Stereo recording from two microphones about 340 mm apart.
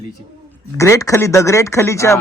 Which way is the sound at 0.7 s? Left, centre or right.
Centre.